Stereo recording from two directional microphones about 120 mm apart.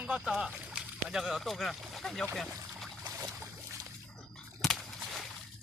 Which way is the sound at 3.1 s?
25° right (ahead or behind).